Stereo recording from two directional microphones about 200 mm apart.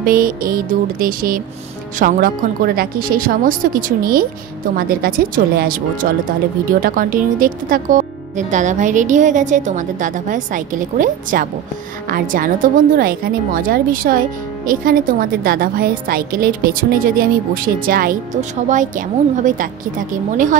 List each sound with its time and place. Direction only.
0.0 s a woman's voice: 45° right (ahead or behind)